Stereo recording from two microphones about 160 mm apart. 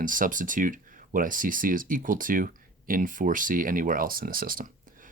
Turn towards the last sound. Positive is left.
turn(degrees=-60)  # may be behind; listen again after turning